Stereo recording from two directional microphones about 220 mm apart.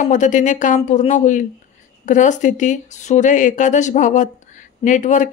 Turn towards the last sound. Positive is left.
turn(degrees=35)  # may be behind; listen again after turning